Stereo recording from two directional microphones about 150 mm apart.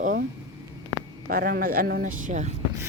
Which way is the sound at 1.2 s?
80° right.